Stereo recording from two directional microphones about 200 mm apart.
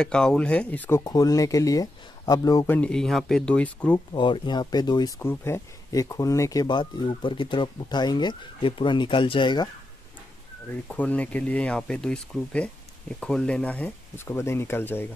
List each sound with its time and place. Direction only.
0.0 s speech: 5° left (ahead or behind)
4.1 s speech: 25° left (ahead or behind)
10.9 s speech: 10° left (ahead or behind)